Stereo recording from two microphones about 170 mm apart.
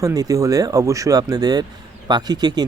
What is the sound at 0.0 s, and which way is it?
Speech, 20° right (ahead or behind).